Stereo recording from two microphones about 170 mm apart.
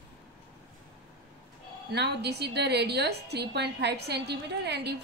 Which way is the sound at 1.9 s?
80° right.